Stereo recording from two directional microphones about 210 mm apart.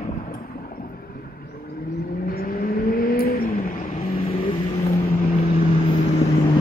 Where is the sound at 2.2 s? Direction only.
45° left (ahead or behind).